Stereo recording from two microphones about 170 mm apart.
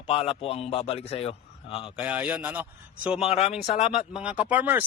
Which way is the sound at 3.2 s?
35° left (ahead or behind).